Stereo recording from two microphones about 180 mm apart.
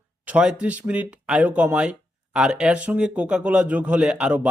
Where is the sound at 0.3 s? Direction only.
5° right (ahead or behind).